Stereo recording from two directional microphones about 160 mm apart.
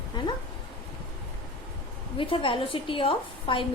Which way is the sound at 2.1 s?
35° left (ahead or behind).